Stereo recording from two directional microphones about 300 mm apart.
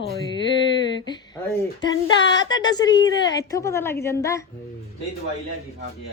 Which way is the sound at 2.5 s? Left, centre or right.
Centre.